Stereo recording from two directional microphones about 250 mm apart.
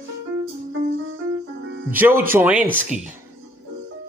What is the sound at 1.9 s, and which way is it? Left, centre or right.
Speech, centre.